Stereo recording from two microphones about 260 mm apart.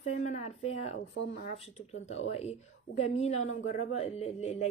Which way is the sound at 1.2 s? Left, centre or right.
Left.